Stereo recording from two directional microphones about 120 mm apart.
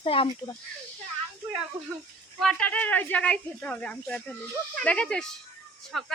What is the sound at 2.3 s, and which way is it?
Speech, 5° left (ahead or behind).